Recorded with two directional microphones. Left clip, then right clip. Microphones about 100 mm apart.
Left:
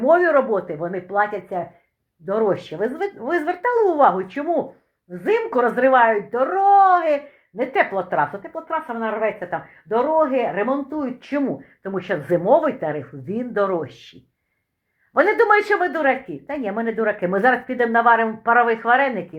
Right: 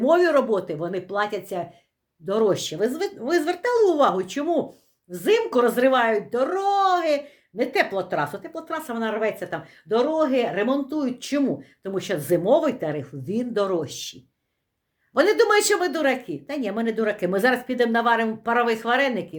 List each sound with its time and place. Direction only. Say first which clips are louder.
0.0 s speech: left 3 dB; 45° right (ahead or behind)
11.4 s speech: left 1 dB; 30° right (ahead or behind)